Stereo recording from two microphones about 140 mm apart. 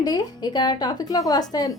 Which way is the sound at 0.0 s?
30° left (ahead or behind).